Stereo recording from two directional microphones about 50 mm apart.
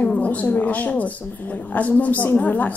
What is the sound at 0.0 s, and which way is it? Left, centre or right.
A woman's voice, left.